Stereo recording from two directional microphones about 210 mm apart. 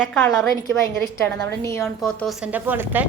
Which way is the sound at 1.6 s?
15° left (ahead or behind).